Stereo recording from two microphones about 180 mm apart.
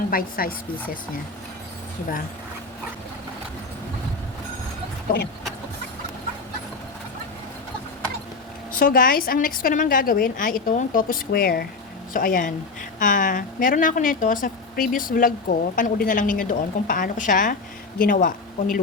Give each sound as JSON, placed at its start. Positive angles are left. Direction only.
{"t": 0.1, "sound": "a woman's voice", "side_deg": 55}
{"t": 8.7, "sound": "a woman's voice", "side_deg": 50}